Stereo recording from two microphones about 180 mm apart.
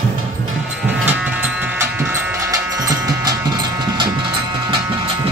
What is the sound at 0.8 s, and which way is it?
Music, 10° right (ahead or behind).